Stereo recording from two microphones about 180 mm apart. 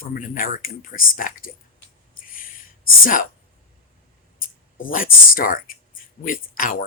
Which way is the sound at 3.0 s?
50° left (ahead or behind).